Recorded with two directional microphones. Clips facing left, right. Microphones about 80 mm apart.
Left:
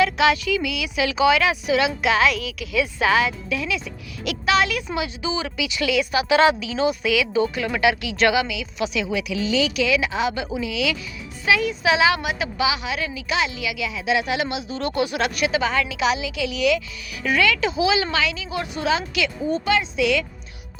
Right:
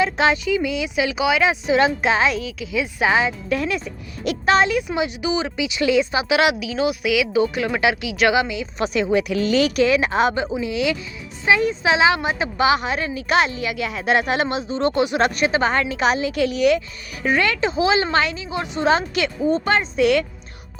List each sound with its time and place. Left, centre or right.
0.0 s speech: right
3.5 s speech: right
6.3 s a woman's voice: centre
8.5 s a woman's voice: right
10.3 s a woman's voice: right
18.4 s speech: right
18.9 s a woman's voice: right